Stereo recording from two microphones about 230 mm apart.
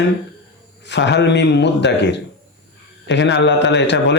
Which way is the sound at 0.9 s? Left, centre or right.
Left.